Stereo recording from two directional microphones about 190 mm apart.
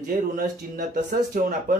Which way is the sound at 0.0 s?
45° right (ahead or behind).